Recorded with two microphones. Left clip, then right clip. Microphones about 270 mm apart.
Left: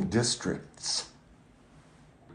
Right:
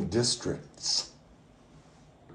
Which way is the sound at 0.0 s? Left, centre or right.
Left.